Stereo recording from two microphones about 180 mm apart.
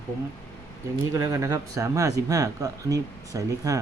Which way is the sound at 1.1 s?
20° right (ahead or behind).